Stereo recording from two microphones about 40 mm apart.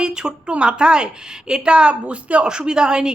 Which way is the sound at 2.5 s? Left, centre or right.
Right.